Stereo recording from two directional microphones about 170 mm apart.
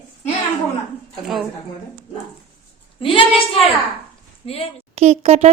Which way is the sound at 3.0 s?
30° left (ahead or behind).